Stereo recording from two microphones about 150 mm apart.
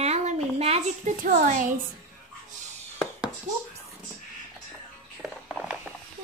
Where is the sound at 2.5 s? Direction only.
55° right (ahead or behind).